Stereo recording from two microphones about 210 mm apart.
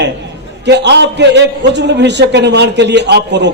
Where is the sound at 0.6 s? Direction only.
55° right (ahead or behind).